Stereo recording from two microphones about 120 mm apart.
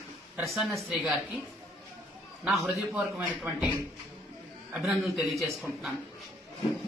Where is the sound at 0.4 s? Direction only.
Centre (ahead or behind).